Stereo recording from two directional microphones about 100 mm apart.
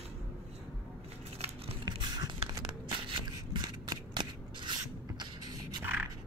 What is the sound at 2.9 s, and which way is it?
Rub, 55° right (ahead or behind).